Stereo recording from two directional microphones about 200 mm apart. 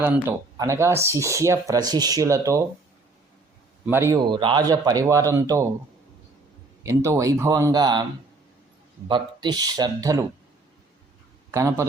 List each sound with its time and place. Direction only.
0.0 s speech: 15° right (ahead or behind)
3.8 s speech: 10° right (ahead or behind)
4.3 s speech: 25° right (ahead or behind)
6.8 s speech: 15° right (ahead or behind)
9.0 s speech: 25° right (ahead or behind)
11.5 s speech: 15° right (ahead or behind)